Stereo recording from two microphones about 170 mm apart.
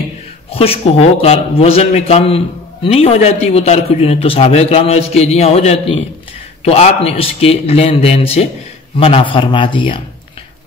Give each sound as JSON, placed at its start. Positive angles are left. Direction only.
{"t": 0.5, "sound": "a man's voice", "side_deg": 35}